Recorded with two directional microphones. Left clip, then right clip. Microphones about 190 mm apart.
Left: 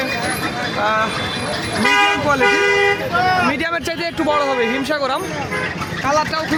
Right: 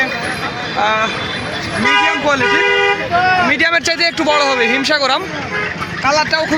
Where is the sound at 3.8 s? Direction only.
5° right (ahead or behind).